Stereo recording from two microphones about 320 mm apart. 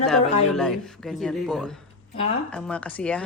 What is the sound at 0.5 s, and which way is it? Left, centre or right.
A woman's voice, centre.